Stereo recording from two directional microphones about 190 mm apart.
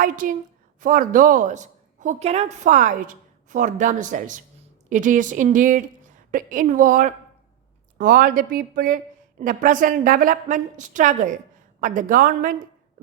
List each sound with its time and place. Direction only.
0.0 s a woman's voice: 45° right (ahead or behind)